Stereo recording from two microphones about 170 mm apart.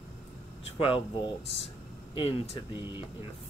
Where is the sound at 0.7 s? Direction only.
30° left (ahead or behind).